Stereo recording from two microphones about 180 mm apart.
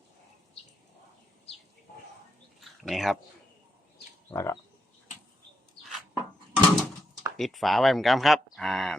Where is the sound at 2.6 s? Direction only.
Centre (ahead or behind).